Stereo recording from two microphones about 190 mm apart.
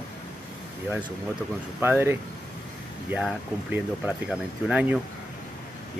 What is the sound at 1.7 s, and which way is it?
Speech, 10° right (ahead or behind).